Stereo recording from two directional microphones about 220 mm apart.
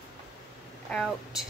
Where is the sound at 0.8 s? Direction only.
Centre (ahead or behind).